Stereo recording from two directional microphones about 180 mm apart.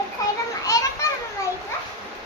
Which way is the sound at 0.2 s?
20° left (ahead or behind).